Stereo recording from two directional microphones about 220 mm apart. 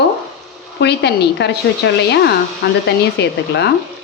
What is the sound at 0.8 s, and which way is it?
A woman's voice, 50° left (ahead or behind).